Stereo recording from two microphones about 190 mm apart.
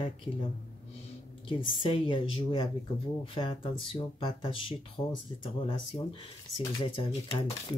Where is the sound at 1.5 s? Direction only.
25° left (ahead or behind).